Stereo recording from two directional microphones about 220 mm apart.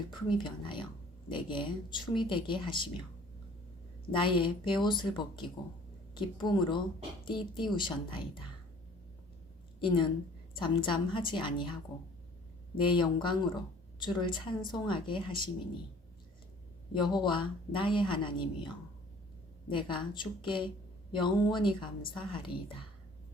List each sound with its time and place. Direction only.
0.1 s a woman's voice: 20° left (ahead or behind)
4.1 s a woman's voice: 20° left (ahead or behind)
9.8 s a woman's voice: 20° left (ahead or behind)
12.7 s a woman's voice: 20° left (ahead or behind)
16.9 s a woman's voice: 20° left (ahead or behind)
19.7 s a woman's voice: 20° left (ahead or behind)